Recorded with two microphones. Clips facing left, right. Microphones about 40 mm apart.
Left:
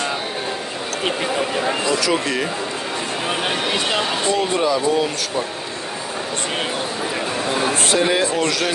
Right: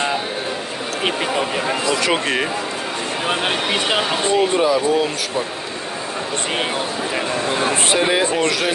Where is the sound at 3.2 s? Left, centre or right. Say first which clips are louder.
Right 2 dB; centre.